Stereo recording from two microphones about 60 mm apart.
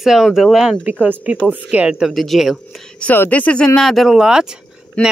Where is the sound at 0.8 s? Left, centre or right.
Right.